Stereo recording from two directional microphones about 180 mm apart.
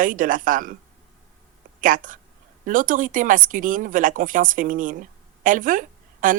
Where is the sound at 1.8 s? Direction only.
50° right (ahead or behind).